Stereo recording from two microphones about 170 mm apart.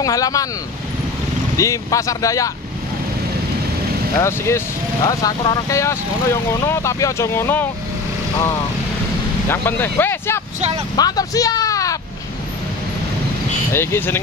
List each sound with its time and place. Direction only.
0.0 s speech: 20° left (ahead or behind)
1.6 s speech: 20° left (ahead or behind)
4.2 s speech: 15° left (ahead or behind)
9.5 s speech: 15° left (ahead or behind)
13.7 s speech: 15° left (ahead or behind)